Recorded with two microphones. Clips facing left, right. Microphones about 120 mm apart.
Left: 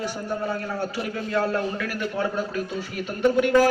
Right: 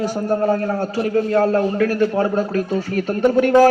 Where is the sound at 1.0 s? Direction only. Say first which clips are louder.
Right 10 dB; 40° right (ahead or behind).